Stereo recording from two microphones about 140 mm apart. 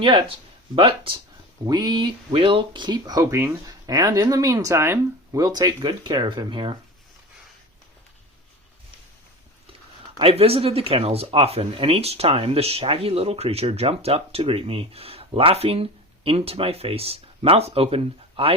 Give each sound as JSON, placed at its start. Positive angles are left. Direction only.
{"t": 0.0, "sound": "speech", "side_deg": -35}
{"t": 10.2, "sound": "speech", "side_deg": -45}